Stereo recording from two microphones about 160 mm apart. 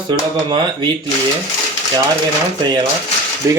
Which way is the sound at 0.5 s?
30° right (ahead or behind).